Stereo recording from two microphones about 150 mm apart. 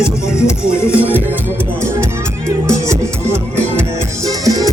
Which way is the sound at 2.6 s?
20° right (ahead or behind).